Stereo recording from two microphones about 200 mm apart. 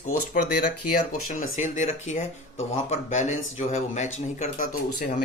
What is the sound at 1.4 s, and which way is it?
Speech, 40° left (ahead or behind).